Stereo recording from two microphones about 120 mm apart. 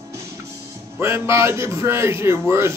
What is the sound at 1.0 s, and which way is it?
Speech, 20° right (ahead or behind).